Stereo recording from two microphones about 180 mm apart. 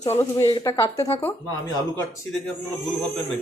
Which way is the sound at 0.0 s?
15° left (ahead or behind).